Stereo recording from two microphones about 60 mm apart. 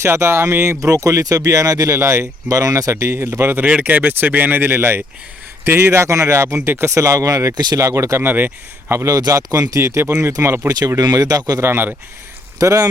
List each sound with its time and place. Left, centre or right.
0.0 s speech: right
2.0 s speech: right
2.5 s speech: right
2.9 s speech: right
3.2 s speech: right
8.2 s speech: right
9.0 s speech: right
10.7 s speech: right
11.6 s speech: right
12.5 s speech: right